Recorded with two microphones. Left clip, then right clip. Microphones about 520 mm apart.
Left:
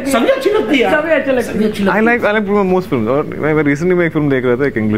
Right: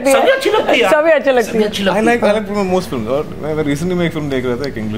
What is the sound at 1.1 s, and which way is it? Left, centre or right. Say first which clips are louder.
Speech: right 2 dB; right.